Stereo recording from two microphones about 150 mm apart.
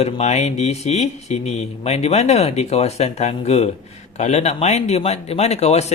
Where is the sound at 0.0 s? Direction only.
50° left (ahead or behind).